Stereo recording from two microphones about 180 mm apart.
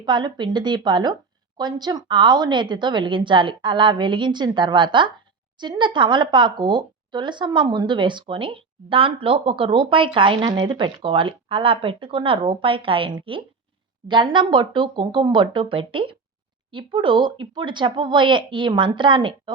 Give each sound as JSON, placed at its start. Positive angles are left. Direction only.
{"t": 0.0, "sound": "speech", "side_deg": -25}